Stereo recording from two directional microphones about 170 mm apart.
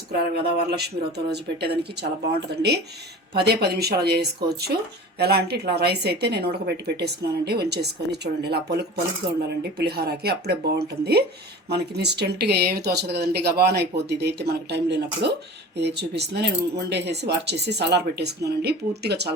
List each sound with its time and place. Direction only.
0.1 s a woman's voice: 70° right (ahead or behind)